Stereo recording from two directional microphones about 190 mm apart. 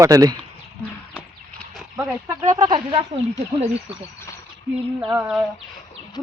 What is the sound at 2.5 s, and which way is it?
Speech, 25° right (ahead or behind).